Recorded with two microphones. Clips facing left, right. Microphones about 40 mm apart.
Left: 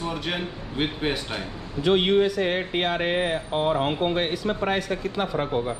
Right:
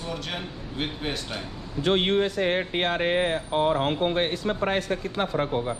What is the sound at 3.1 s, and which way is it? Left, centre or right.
Speech, left.